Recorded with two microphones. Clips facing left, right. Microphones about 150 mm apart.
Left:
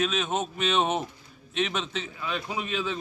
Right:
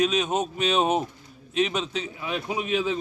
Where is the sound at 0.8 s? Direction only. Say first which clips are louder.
Right 4 dB; 5° right (ahead or behind).